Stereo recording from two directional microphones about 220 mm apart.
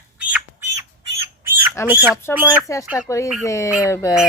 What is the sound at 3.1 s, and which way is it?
Speech, 10° left (ahead or behind).